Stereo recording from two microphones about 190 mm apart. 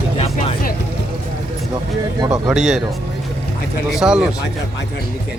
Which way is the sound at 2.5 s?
Centre (ahead or behind).